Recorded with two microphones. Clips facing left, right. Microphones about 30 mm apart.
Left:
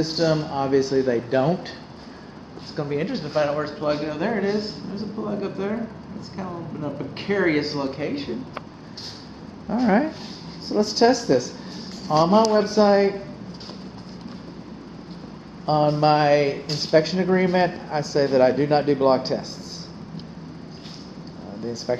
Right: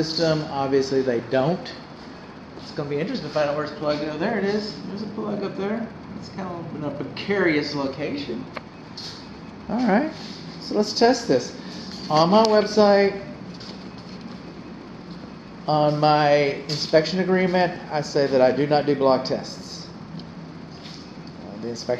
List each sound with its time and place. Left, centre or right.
0.0 s speech: centre
2.7 s a woman's voice: centre
5.3 s speech: centre
9.7 s speech: centre
12.1 s a man's voice: right
12.6 s speech: right
15.6 s speech: centre